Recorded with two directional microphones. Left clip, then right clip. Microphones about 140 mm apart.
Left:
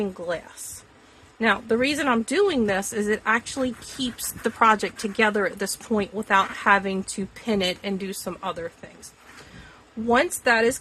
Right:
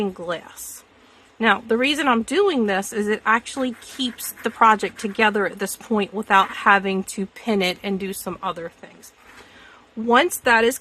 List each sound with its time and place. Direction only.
0.0 s a woman's voice: 45° right (ahead or behind)
10.1 s a woman's voice: 50° right (ahead or behind)